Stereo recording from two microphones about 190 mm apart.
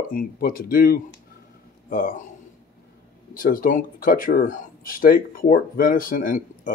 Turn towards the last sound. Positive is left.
turn(degrees=45)  # may be behind; listen again after turning